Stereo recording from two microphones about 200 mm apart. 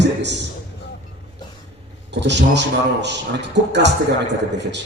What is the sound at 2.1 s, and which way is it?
A man's voice, 60° right (ahead or behind).